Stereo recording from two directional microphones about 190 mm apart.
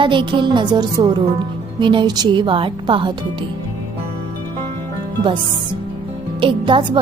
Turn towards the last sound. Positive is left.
turn(degrees=-25)  # may be behind; listen again after turning